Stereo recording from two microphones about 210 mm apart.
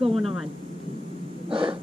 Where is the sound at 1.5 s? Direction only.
25° right (ahead or behind).